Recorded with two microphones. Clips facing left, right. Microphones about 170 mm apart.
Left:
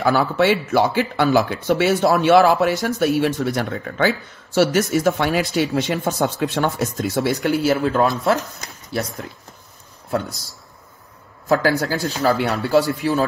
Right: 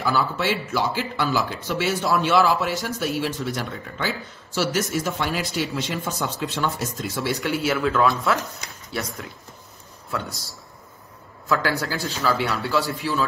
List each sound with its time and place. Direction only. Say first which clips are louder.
0.0 s speech: left 6 dB; 60° left (ahead or behind)
7.2 s speech: left 5 dB; 45° left (ahead or behind)
11.4 s a man's voice: left 6 dB; 45° left (ahead or behind)